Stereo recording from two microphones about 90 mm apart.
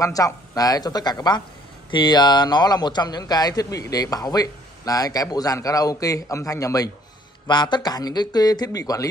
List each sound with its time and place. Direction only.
0.0 s speech: 40° left (ahead or behind)
7.4 s speech: 55° left (ahead or behind)